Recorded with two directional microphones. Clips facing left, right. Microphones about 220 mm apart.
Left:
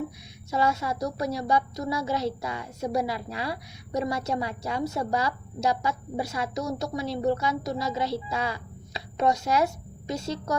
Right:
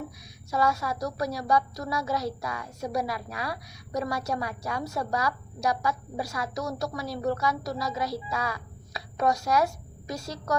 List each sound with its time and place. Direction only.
0.5 s a woman's voice: 25° left (ahead or behind)